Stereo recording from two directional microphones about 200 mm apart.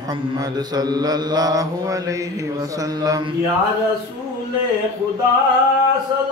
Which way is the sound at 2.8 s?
15° right (ahead or behind).